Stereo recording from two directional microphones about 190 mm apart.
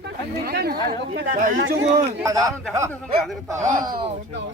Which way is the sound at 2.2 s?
15° right (ahead or behind).